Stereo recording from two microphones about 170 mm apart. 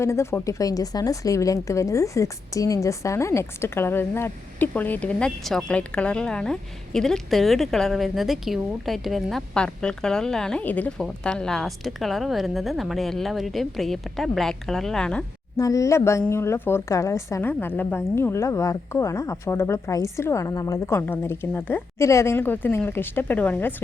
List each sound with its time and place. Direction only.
0.0 s speech: 15° left (ahead or behind)
15.5 s a woman's voice: 20° left (ahead or behind)